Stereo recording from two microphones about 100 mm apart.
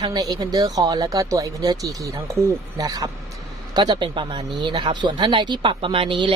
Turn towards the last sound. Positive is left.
turn(degrees=-60)  # may be behind; listen again after turning